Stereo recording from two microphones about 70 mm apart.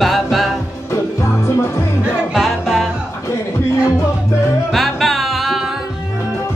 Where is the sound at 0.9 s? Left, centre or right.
Left.